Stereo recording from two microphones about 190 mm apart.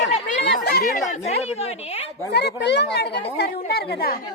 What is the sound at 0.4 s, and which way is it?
Chatter, 55° left (ahead or behind).